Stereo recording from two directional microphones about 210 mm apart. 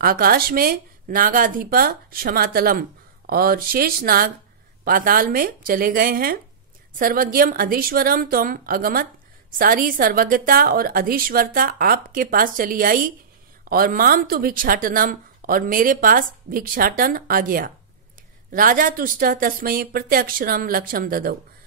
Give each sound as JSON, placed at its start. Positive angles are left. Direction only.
{"t": 0.0, "sound": "speech", "side_deg": -45}